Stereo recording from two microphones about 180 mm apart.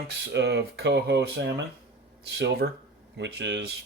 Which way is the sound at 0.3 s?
65° right (ahead or behind).